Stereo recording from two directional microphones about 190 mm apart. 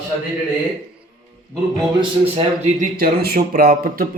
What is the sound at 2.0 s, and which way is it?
Speech, 35° right (ahead or behind).